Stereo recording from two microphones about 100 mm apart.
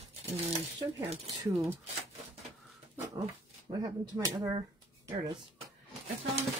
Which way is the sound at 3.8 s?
35° right (ahead or behind).